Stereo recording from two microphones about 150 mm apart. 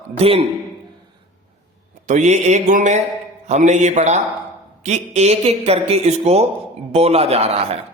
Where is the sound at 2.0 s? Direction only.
50° right (ahead or behind).